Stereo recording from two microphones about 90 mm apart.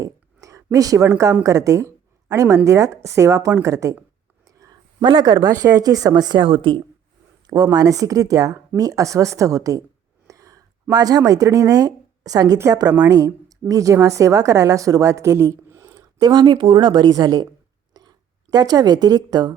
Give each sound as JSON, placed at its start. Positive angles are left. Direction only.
{"t": 0.0, "sound": "a sound", "side_deg": -35}
{"t": 1.5, "sound": "a woman's voice", "side_deg": -35}
{"t": 4.4, "sound": "a sound", "side_deg": -40}
{"t": 5.0, "sound": "a woman's voice", "side_deg": -50}
{"t": 6.4, "sound": "a woman's voice", "side_deg": -70}
{"t": 7.4, "sound": "a woman's voice", "side_deg": -45}
{"t": 16.2, "sound": "a woman's voice", "side_deg": -55}
{"t": 18.0, "sound": "a sound", "side_deg": -50}
{"t": 18.5, "sound": "a woman's voice", "side_deg": -45}